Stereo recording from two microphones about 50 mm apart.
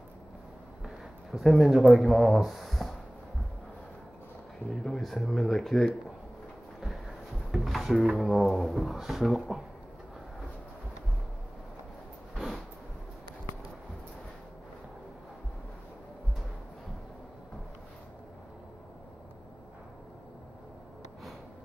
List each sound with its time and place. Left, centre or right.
0.8 s speech: centre
4.8 s speech: centre
7.5 s drawer open or close: centre
8.0 s speech: centre
12.4 s a sound: centre